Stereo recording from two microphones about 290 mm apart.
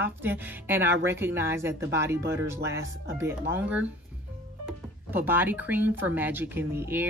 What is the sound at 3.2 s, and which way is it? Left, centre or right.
Speech, centre.